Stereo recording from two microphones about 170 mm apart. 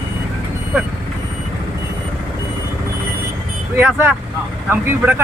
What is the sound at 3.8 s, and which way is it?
Speech, 15° right (ahead or behind).